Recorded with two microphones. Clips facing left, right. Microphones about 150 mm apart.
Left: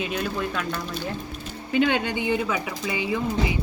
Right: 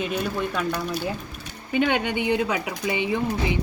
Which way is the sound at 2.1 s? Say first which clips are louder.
Right 2 dB; 20° right (ahead or behind).